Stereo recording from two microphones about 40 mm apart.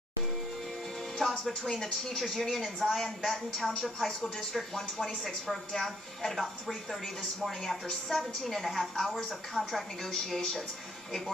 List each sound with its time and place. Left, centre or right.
1.4 s a woman's voice: centre
4.7 s a woman's voice: centre